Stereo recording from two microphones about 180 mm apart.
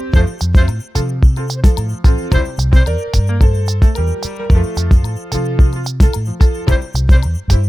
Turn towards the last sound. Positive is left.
turn(degrees=0)  # may be behind; listen again after turning